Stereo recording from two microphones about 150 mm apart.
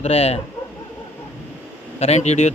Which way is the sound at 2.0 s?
45° left (ahead or behind).